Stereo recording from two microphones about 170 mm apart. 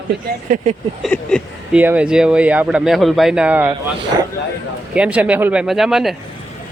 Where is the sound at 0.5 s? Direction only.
40° right (ahead or behind).